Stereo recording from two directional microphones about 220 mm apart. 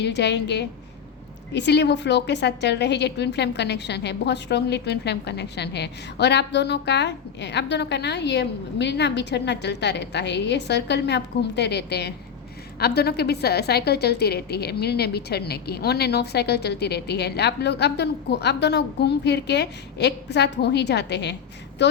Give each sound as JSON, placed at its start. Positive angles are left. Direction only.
{"t": 0.0, "sound": "a woman's voice", "side_deg": 50}